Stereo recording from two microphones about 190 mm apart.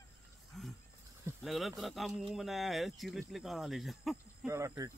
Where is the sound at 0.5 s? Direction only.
Centre (ahead or behind).